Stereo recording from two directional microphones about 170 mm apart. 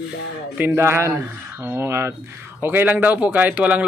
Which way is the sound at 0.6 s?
15° right (ahead or behind).